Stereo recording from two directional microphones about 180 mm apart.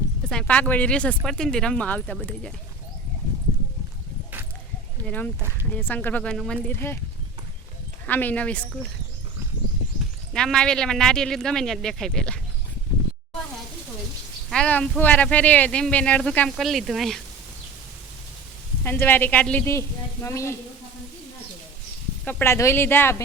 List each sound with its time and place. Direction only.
0.3 s speech: 5° left (ahead or behind)
5.0 s speech: 10° left (ahead or behind)
8.0 s speech: 10° left (ahead or behind)
10.3 s speech: 5° left (ahead or behind)
14.5 s speech: 5° left (ahead or behind)
18.8 s speech: 10° left (ahead or behind)
22.2 s speech: 10° left (ahead or behind)